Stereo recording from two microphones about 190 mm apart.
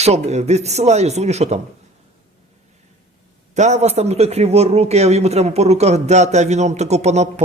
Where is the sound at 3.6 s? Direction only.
35° right (ahead or behind).